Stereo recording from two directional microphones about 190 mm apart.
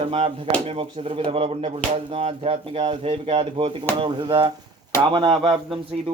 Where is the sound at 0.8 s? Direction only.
30° right (ahead or behind).